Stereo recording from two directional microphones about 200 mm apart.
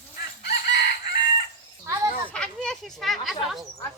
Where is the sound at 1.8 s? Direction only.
15° right (ahead or behind).